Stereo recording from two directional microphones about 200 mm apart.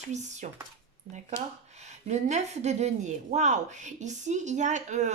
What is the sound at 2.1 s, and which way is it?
Speech, 35° right (ahead or behind).